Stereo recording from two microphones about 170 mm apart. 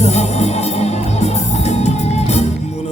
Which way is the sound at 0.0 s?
40° left (ahead or behind).